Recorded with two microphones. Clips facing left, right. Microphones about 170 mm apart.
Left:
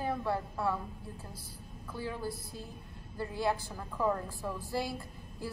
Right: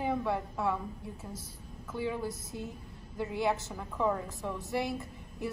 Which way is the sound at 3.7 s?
Centre (ahead or behind).